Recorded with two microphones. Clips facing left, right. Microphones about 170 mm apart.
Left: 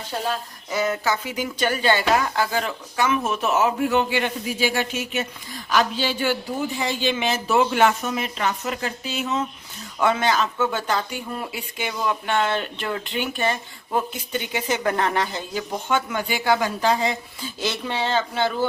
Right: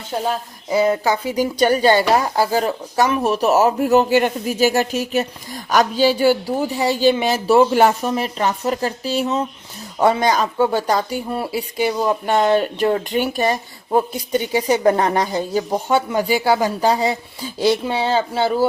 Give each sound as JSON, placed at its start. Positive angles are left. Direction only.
{"t": 0.7, "sound": "speech", "side_deg": -30}
{"t": 17.7, "sound": "speech", "side_deg": -10}
{"t": 18.1, "sound": "speech", "side_deg": -35}